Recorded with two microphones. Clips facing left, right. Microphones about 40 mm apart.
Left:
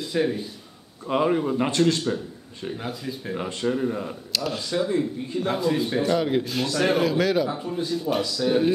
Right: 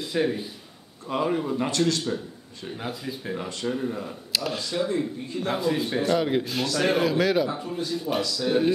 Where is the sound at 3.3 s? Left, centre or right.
Left.